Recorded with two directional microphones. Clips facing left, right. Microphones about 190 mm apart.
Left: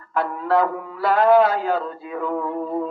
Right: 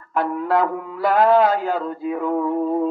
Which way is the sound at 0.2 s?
20° right (ahead or behind).